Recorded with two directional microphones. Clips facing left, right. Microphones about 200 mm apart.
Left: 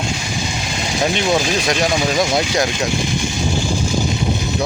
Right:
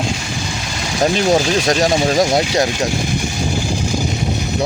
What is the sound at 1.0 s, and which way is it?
Speech, 40° right (ahead or behind).